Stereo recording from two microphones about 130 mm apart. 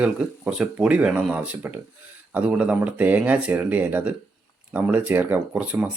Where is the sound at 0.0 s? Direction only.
5° right (ahead or behind).